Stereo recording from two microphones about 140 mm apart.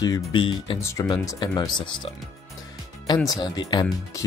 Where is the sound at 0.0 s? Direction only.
30° left (ahead or behind).